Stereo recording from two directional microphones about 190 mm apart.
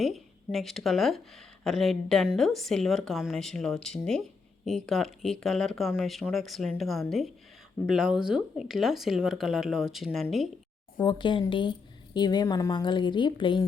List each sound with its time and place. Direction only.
0.0 s speech: centre (ahead or behind)
10.9 s a woman's voice: 25° left (ahead or behind)